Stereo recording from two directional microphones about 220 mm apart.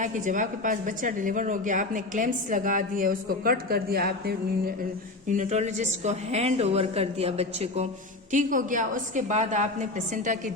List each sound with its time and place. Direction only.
0.0 s a woman's voice: 35° right (ahead or behind)
5.4 s a woman's voice: 30° right (ahead or behind)